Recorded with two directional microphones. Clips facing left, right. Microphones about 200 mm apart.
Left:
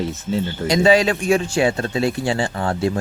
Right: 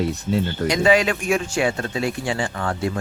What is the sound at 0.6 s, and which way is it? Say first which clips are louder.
A man's voice: left 3 dB; 30° left (ahead or behind).